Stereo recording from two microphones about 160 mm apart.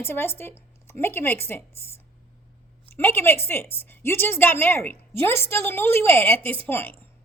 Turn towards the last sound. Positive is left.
turn(degrees=15)  # may be behind; listen again after turning